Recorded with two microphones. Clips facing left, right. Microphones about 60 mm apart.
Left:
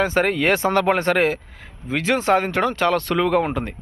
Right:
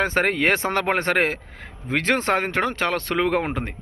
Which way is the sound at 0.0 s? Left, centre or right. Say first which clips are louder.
Left 2 dB; right.